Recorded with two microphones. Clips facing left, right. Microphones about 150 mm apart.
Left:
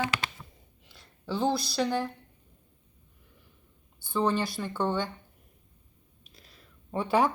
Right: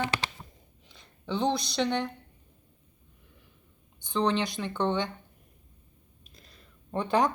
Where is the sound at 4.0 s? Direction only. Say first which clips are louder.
Even; 5° left (ahead or behind).